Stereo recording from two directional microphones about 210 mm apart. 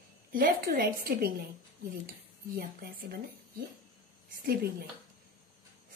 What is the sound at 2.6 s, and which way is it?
Speech, 45° right (ahead or behind).